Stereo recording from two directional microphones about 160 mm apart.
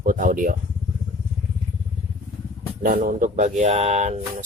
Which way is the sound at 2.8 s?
60° right (ahead or behind).